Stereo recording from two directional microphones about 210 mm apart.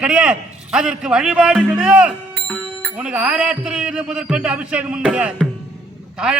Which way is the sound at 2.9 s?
5° right (ahead or behind).